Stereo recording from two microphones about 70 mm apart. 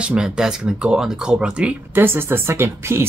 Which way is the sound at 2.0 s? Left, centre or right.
Right.